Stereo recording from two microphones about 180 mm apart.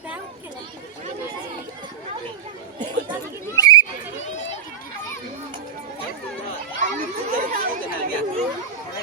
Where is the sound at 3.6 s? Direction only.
20° left (ahead or behind).